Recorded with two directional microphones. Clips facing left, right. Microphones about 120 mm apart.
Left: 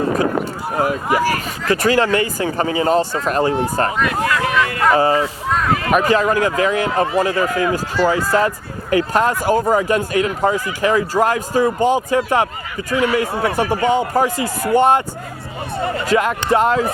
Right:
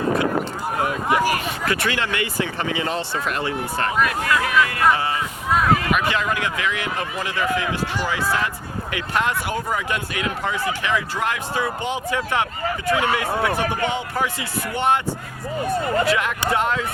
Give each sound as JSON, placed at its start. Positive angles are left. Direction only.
{"t": 0.9, "sound": "speech", "side_deg": 0}
{"t": 1.6, "sound": "speech", "side_deg": 40}
{"t": 16.0, "sound": "speech", "side_deg": 40}